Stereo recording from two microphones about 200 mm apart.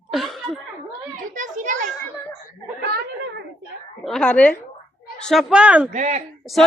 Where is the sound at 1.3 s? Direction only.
40° right (ahead or behind).